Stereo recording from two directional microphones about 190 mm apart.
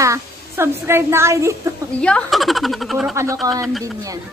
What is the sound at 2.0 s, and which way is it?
Speech, 5° left (ahead or behind).